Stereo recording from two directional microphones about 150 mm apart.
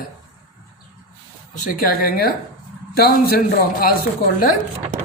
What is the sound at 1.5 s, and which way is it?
Speech, 65° left (ahead or behind).